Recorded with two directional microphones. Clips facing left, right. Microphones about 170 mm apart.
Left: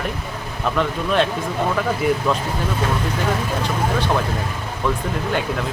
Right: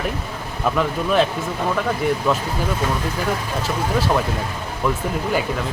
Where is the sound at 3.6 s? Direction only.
5° right (ahead or behind).